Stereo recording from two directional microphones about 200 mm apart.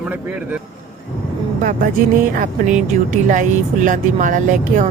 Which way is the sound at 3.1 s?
40° right (ahead or behind).